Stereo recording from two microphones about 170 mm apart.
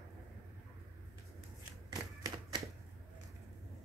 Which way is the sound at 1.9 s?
25° right (ahead or behind).